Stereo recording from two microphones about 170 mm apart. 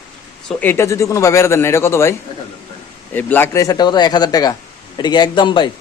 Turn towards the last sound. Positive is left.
turn(degrees=30)  # may be behind; listen again after turning